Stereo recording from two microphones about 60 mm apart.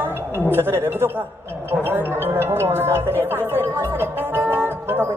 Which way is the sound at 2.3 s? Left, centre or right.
Right.